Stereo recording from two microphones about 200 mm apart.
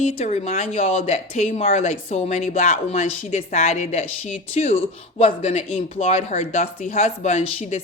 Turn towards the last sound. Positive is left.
turn(degrees=35)  # may be behind; listen again after turning